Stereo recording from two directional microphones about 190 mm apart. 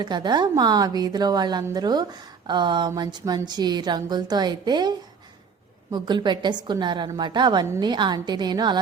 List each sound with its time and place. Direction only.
0.0 s a woman's voice: 20° right (ahead or behind)